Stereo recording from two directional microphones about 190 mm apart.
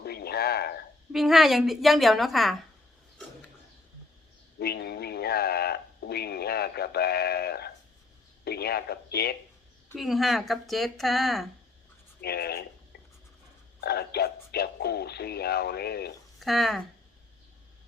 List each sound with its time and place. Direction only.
0.0 s a sound: 55° left (ahead or behind)
1.1 s speech: centre (ahead or behind)
4.6 s radio: 60° left (ahead or behind)
8.4 s a man's voice: 55° left (ahead or behind)
9.9 s speech: centre (ahead or behind)
12.2 s a sound: 55° left (ahead or behind)
13.8 s speech: 55° left (ahead or behind)
16.4 s speech: centre (ahead or behind)